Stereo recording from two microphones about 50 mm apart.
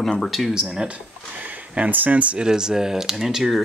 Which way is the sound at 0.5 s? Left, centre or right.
Centre.